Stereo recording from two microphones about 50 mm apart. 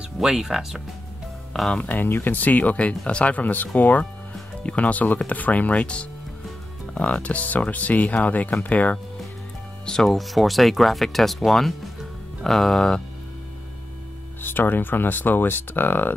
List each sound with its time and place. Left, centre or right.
0.2 s speech: centre
1.5 s speech: centre
1.9 s speech: left
9.8 s speech: centre
14.4 s speech: left